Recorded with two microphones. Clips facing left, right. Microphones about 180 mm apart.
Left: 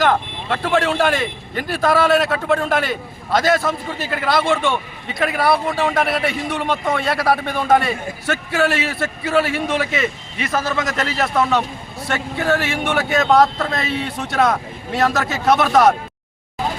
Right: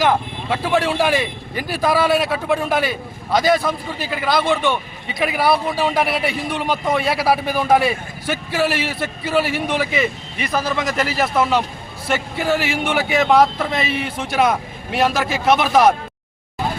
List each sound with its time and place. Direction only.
0.0 s a man's voice: 5° right (ahead or behind)